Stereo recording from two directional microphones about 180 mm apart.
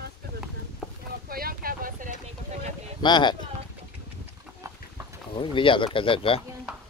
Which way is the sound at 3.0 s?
25° left (ahead or behind).